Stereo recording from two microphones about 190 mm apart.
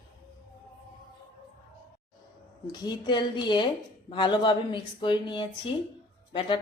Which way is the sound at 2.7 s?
20° left (ahead or behind).